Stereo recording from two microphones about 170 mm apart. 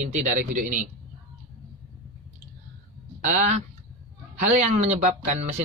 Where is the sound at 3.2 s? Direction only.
45° right (ahead or behind).